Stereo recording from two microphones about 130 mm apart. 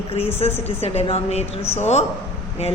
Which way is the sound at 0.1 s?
50° left (ahead or behind).